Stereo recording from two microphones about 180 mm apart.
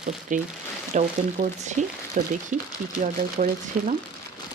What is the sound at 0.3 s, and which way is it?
Speech, 45° right (ahead or behind).